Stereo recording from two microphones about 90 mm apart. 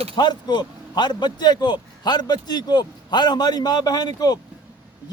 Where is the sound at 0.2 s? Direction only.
55° left (ahead or behind).